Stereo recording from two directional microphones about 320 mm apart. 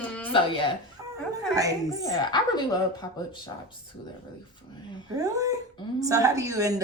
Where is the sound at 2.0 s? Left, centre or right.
Centre.